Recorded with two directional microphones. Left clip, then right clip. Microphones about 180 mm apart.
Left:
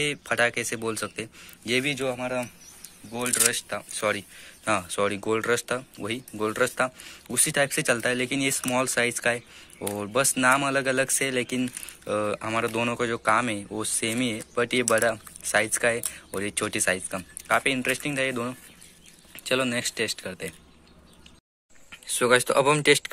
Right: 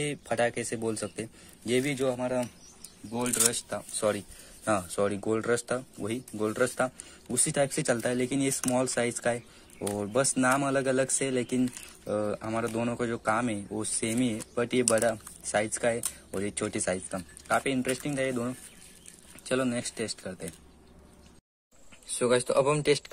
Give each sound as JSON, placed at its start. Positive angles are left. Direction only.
{"t": 0.0, "sound": "a man's voice", "side_deg": -10}
{"t": 12.1, "sound": "speech", "side_deg": 0}
{"t": 21.9, "sound": "speech", "side_deg": 0}